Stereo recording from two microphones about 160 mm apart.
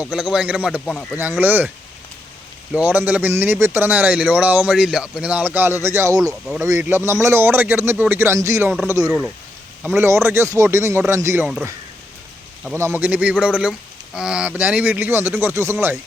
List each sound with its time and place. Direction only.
0.0 s a man's voice: 5° right (ahead or behind)
2.7 s a man's voice: 10° right (ahead or behind)
12.7 s a man's voice: 15° right (ahead or behind)